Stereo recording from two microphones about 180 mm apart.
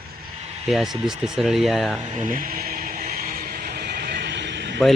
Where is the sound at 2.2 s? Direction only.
50° right (ahead or behind); by 4.8 s 75° right (ahead or behind).